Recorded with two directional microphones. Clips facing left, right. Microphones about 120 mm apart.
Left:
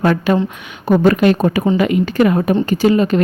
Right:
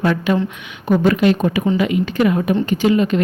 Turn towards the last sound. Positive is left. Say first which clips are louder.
# left 2 dB
turn(degrees=40)  # may be behind; listen again after turning